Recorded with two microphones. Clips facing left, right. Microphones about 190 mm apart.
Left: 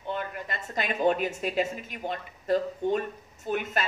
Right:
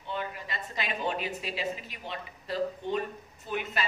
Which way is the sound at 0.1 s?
50° left (ahead or behind).